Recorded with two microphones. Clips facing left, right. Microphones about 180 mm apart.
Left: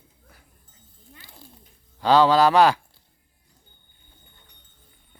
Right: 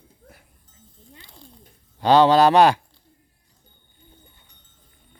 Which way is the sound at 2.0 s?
20° right (ahead or behind).